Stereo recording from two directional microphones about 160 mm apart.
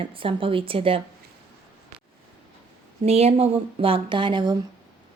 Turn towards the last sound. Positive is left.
turn(degrees=-30)  # may be behind; listen again after turning